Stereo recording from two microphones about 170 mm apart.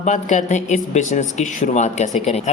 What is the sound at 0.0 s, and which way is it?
Speech, 45° left (ahead or behind).